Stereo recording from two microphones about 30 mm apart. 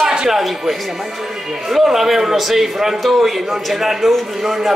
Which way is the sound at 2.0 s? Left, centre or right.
Centre.